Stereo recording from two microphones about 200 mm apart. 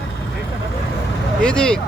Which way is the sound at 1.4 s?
5° left (ahead or behind).